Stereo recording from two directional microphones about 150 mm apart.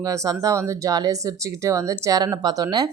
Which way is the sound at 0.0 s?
20° right (ahead or behind).